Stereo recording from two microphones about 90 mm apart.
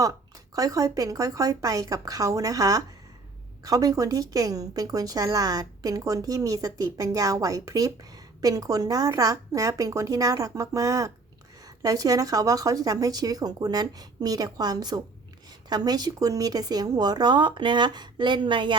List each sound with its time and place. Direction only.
0.0 s a woman's voice: 40° right (ahead or behind); by 18.8 s 65° right (ahead or behind)